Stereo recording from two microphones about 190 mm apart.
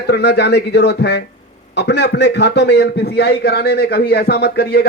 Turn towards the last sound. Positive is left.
turn(degrees=55)  # may be behind; listen again after turning